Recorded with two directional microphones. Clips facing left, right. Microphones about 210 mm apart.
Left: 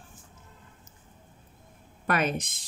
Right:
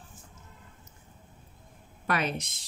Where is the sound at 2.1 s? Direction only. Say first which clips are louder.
Left 3 dB; 50° left (ahead or behind).